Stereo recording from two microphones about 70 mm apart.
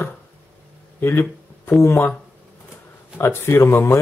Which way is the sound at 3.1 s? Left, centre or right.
Left.